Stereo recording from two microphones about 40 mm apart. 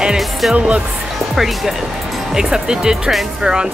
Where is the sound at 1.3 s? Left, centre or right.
Centre.